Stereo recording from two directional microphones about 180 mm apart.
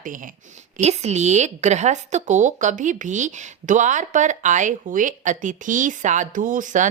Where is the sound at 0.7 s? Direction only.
35° right (ahead or behind).